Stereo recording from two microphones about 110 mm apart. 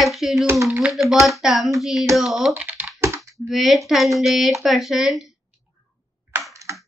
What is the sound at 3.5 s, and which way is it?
A child's voice, centre (ahead or behind).